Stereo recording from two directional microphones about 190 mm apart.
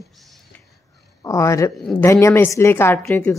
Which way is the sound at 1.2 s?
15° left (ahead or behind).